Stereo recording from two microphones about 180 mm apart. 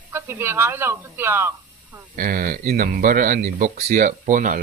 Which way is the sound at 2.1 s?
50° right (ahead or behind).